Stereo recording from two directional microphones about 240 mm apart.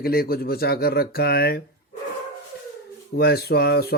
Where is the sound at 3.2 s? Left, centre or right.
Left.